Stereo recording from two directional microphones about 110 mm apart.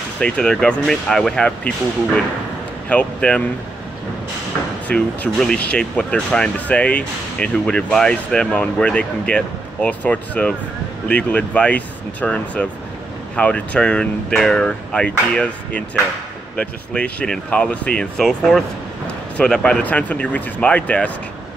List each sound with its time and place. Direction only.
0.2 s speech: 5° left (ahead or behind)
2.9 s speech: 10° left (ahead or behind)
4.8 s speech: 15° left (ahead or behind)